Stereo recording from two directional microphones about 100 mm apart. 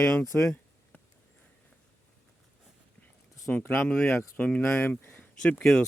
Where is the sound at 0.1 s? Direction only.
15° left (ahead or behind).